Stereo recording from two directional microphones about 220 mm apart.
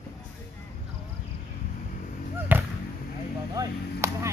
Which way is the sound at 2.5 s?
10° right (ahead or behind).